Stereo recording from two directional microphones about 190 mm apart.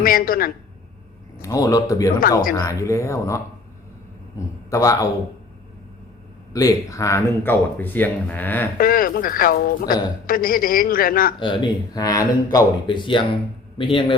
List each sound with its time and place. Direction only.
0.0 s speech: 50° left (ahead or behind)
1.4 s speech: 15° left (ahead or behind)
6.5 s speech: 20° left (ahead or behind)
8.8 s speech: 50° left (ahead or behind)
11.3 s speech: 25° left (ahead or behind)